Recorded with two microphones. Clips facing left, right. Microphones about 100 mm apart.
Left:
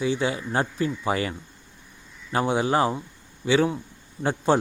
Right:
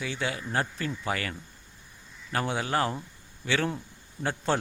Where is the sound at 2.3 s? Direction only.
20° left (ahead or behind).